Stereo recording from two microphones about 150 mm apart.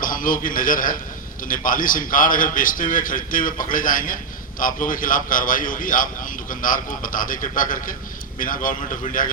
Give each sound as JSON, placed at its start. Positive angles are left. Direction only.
{"t": 0.0, "sound": "a man's voice", "side_deg": 65}